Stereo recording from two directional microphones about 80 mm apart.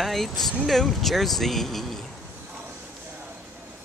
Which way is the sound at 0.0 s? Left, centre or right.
Centre.